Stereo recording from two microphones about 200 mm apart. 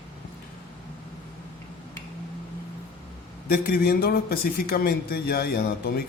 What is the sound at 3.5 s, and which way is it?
Speech, 50° left (ahead or behind).